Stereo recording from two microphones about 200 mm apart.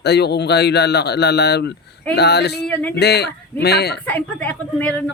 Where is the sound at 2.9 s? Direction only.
55° left (ahead or behind).